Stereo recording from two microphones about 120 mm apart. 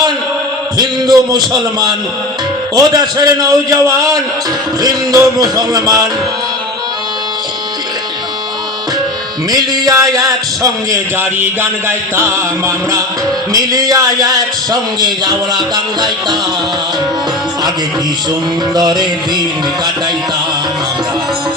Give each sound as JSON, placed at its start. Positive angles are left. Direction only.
{"t": 0.8, "sound": "a man's voice", "side_deg": -35}
{"t": 2.7, "sound": "a man's voice", "side_deg": -30}
{"t": 9.5, "sound": "a man's voice", "side_deg": -30}
{"t": 18.7, "sound": "a man's voice", "side_deg": -35}